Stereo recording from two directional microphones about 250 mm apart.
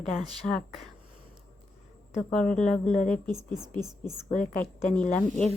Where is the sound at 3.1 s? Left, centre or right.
Centre.